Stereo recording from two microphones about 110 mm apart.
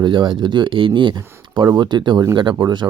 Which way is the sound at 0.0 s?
45° right (ahead or behind).